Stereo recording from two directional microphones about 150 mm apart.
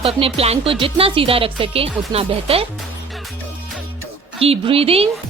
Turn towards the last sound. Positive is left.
turn(degrees=-40)  # may be behind; listen again after turning